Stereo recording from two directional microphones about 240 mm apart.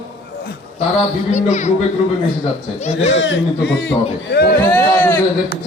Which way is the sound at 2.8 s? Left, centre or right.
Left.